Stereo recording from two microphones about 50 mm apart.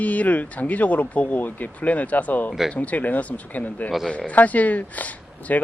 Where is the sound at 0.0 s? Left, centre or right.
Left.